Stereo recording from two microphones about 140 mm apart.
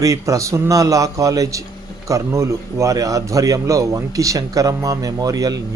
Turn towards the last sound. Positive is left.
turn(degrees=-25)  # may be behind; listen again after turning